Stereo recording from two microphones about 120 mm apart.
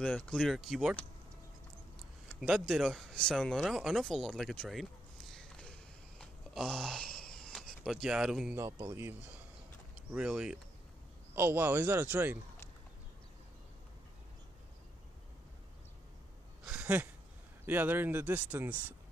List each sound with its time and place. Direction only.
0.0 s speech: 5° left (ahead or behind)
2.4 s speech: centre (ahead or behind)
4.6 s a sound: centre (ahead or behind)
8.5 s speech: 25° right (ahead or behind)
9.9 s speech: 5° right (ahead or behind)
11.3 s speech: 20° right (ahead or behind)
16.7 s a sound: 15° right (ahead or behind)
17.6 s speech: 15° right (ahead or behind)